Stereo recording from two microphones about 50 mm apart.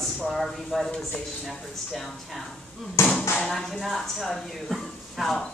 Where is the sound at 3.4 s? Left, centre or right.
Centre.